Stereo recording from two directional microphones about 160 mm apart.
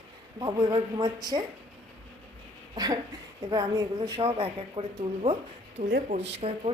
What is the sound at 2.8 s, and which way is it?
A woman's voice, 25° right (ahead or behind).